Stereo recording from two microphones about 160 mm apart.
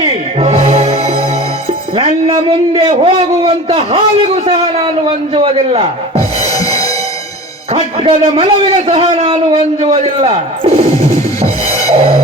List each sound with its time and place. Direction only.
0.0 s music: 40° right (ahead or behind)
2.0 s a man's voice: 40° right (ahead or behind)
6.5 s music: 20° left (ahead or behind)
7.7 s a man's voice: 35° right (ahead or behind)
11.9 s music: 40° right (ahead or behind)